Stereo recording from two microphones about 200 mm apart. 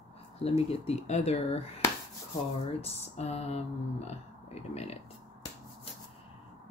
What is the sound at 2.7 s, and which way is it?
Speech, 30° left (ahead or behind).